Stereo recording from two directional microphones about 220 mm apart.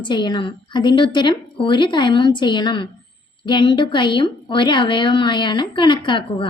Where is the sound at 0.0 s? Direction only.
20° left (ahead or behind).